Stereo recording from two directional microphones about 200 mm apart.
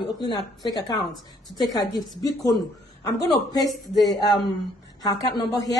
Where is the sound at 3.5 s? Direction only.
20° left (ahead or behind).